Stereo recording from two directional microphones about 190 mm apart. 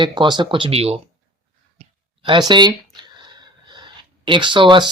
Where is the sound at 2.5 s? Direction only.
25° right (ahead or behind).